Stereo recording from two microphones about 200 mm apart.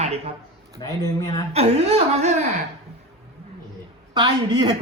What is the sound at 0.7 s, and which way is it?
Speech, 15° left (ahead or behind).